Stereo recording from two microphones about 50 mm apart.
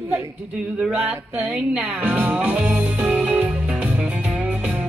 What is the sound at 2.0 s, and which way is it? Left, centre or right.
Music, right.